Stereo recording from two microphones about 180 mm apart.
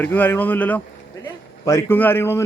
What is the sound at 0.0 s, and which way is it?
A man's voice, 10° left (ahead or behind).